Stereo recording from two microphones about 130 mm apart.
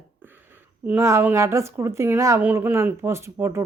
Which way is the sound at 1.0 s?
20° right (ahead or behind).